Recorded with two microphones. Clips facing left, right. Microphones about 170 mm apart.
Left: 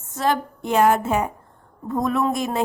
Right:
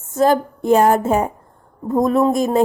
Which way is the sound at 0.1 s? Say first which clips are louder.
Right 7 dB; 45° right (ahead or behind).